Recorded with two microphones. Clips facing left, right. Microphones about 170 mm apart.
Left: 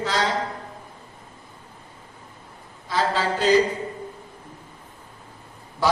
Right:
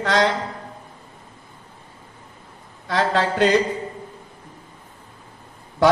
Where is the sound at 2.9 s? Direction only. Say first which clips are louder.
Right 3 dB; 70° right (ahead or behind).